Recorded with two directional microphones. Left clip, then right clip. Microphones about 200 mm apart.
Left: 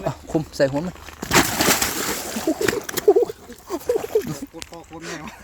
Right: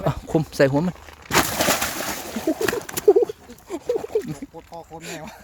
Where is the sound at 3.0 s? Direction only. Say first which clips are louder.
Even; 30° right (ahead or behind).